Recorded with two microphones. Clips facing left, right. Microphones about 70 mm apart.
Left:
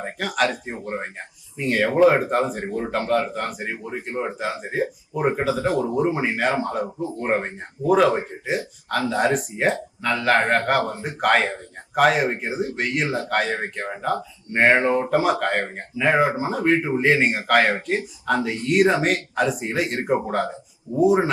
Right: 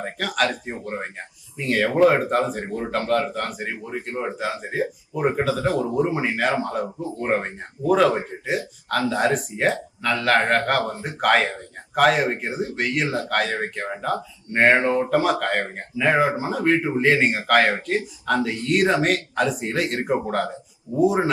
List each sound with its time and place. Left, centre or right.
0.0 s speech: centre
1.5 s speech: centre
4.2 s speech: centre
5.6 s speech: left
5.9 s speech: centre
14.8 s speech: centre
15.1 s speech: centre